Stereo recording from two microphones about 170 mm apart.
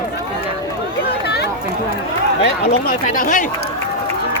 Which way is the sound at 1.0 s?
75° left (ahead or behind).